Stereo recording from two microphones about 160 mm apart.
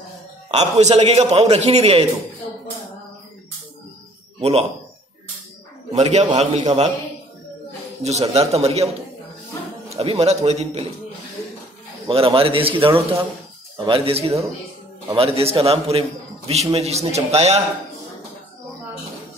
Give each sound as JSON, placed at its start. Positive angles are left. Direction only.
{"t": 0.5, "sound": "a man's voice", "side_deg": -45}
{"t": 4.4, "sound": "speech", "side_deg": -40}
{"t": 5.9, "sound": "a man's voice", "side_deg": -45}
{"t": 8.0, "sound": "a man's voice", "side_deg": -45}
{"t": 12.1, "sound": "a man's voice", "side_deg": -35}